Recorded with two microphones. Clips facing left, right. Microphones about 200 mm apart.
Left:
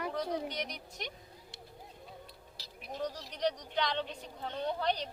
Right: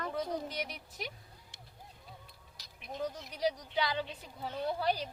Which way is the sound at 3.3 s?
5° right (ahead or behind).